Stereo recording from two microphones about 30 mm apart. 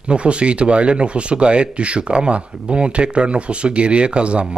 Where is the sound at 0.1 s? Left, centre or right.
Right.